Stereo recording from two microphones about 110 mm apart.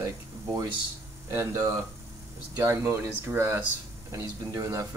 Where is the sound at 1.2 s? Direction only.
25° right (ahead or behind).